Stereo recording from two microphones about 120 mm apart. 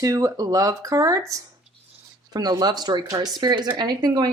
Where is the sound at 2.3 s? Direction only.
35° right (ahead or behind).